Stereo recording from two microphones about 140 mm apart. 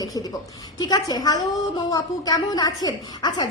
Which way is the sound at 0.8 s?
30° left (ahead or behind).